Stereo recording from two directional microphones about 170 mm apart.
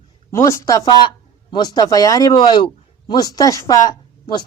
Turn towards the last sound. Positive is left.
turn(degrees=25)  # may be behind; listen again after turning